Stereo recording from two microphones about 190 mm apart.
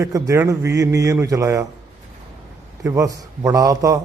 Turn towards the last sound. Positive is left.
turn(degrees=-15)  # may be behind; listen again after turning